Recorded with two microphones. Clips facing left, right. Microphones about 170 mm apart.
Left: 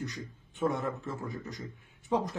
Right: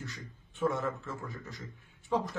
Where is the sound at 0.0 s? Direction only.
15° left (ahead or behind).